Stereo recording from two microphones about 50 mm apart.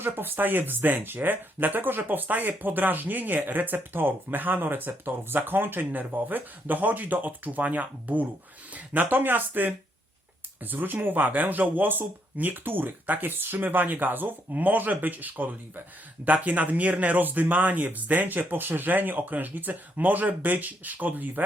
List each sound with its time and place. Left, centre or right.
0.0 s speech: right